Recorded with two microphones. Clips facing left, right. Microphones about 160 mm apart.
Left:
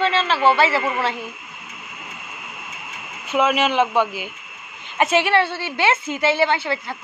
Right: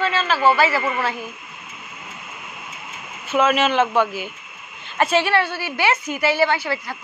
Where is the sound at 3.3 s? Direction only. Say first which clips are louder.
Right 1 dB; 15° left (ahead or behind).